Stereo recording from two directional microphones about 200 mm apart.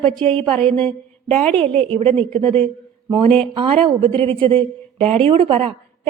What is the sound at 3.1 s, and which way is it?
Speech, 25° right (ahead or behind).